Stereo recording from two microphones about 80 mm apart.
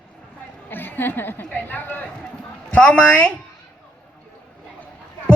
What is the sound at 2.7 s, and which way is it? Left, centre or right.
Speech, centre.